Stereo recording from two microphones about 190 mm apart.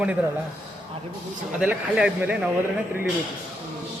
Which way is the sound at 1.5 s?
5° right (ahead or behind).